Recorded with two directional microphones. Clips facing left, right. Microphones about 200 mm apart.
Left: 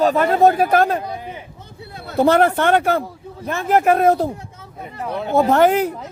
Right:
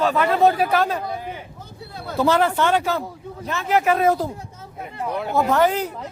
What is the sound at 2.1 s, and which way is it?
Speech, 55° left (ahead or behind).